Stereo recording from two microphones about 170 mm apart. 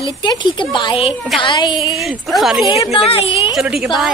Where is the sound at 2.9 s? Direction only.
35° left (ahead or behind).